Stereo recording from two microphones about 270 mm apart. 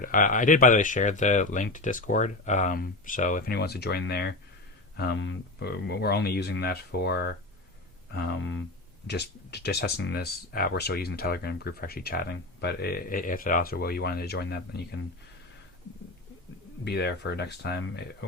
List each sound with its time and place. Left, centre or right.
0.0 s speech: left
16.8 s speech: left